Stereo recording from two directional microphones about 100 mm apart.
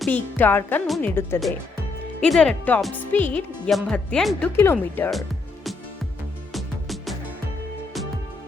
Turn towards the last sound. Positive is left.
turn(degrees=0)  # may be behind; listen again after turning